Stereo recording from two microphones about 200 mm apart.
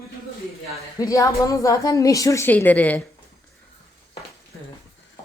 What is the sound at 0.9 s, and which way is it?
A woman's voice, 15° left (ahead or behind).